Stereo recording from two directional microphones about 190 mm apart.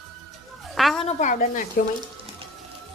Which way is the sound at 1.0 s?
40° left (ahead or behind).